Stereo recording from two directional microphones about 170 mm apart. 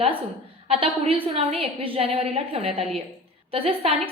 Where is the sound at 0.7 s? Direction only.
35° right (ahead or behind).